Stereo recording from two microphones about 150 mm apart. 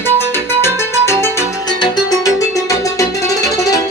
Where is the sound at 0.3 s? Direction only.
15° left (ahead or behind).